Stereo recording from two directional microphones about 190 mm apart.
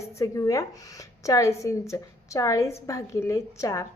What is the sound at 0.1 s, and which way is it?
A woman's voice, 15° left (ahead or behind).